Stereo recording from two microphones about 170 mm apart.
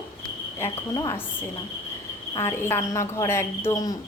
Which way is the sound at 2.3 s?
15° left (ahead or behind).